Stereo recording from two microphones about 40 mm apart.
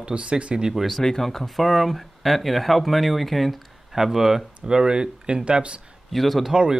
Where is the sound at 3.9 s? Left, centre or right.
Centre; by 5.8 s right.